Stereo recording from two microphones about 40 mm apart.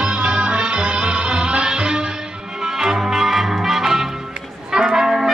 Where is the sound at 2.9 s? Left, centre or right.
Centre.